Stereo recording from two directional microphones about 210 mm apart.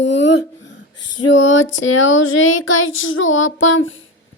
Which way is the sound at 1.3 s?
65° left (ahead or behind).